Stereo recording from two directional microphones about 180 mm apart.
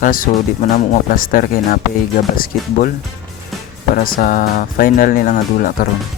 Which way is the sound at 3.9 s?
50° left (ahead or behind).